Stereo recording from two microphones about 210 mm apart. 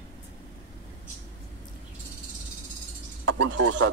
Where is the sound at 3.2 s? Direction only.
60° right (ahead or behind).